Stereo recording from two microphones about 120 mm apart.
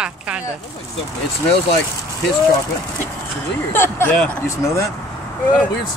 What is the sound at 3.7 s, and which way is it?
Speech, 20° left (ahead or behind).